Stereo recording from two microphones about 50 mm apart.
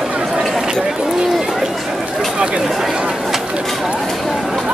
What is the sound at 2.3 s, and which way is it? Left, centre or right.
Speech, centre.